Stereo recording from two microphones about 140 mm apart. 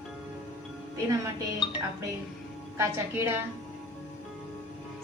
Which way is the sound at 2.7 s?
20° right (ahead or behind).